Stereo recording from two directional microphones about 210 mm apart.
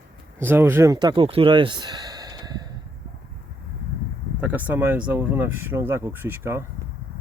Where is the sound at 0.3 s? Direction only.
10° right (ahead or behind).